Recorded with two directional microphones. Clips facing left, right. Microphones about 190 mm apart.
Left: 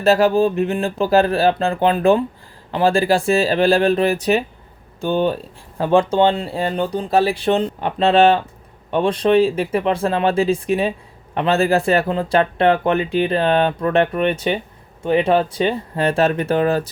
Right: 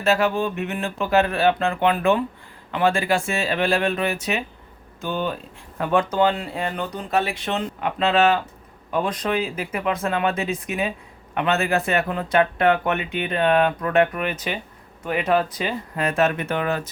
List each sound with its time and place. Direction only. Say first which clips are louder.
0.0 s speech: left 6 dB; 35° left (ahead or behind)